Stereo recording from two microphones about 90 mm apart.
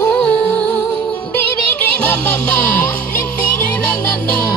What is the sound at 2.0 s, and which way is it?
Music, 15° left (ahead or behind).